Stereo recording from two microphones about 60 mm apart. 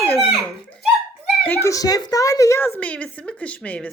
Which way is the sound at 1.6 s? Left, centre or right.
Left.